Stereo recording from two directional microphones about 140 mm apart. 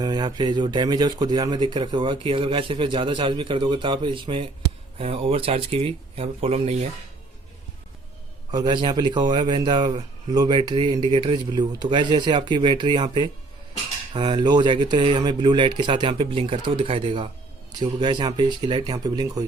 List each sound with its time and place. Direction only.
0.0 s a man's voice: 25° right (ahead or behind); by 6.7 s 45° right (ahead or behind)
8.4 s a man's voice: 30° right (ahead or behind)